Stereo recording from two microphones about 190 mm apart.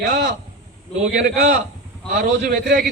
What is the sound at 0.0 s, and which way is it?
Speech, 60° right (ahead or behind).